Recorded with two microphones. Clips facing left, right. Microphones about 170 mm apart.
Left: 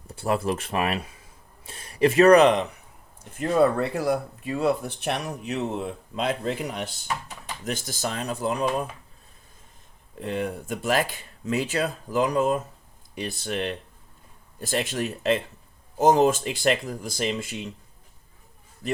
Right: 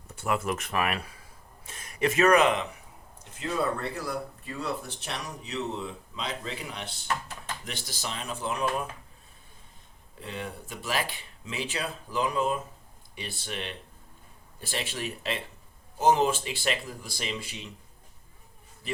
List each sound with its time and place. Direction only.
0.1 s speech: 35° left (ahead or behind)
1.6 s speech: 35° left (ahead or behind)
3.3 s speech: 55° left (ahead or behind)
7.1 s typing: 10° left (ahead or behind)
7.6 s speech: 45° left (ahead or behind)
10.2 s speech: 50° left (ahead or behind)